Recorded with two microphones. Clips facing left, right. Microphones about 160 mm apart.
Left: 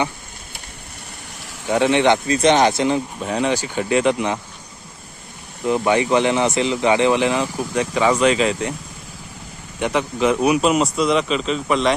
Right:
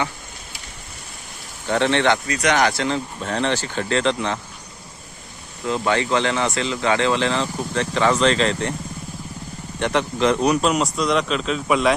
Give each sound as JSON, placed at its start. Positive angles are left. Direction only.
{"t": 1.6, "sound": "speech", "side_deg": 10}
{"t": 5.6, "sound": "speech", "side_deg": 15}
{"t": 9.8, "sound": "speech", "side_deg": 5}